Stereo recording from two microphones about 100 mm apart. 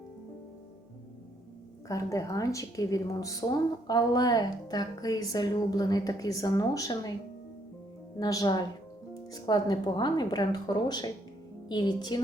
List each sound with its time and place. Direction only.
1.9 s a woman's voice: 35° left (ahead or behind)
8.2 s a woman's voice: 40° left (ahead or behind)